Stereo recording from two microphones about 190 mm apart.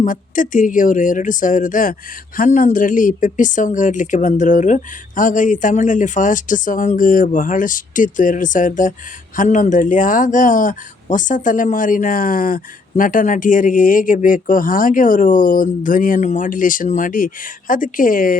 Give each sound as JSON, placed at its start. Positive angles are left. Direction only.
{"t": 0.0, "sound": "speech", "side_deg": 45}